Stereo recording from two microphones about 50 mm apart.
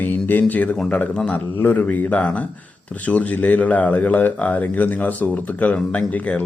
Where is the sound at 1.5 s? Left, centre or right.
Left.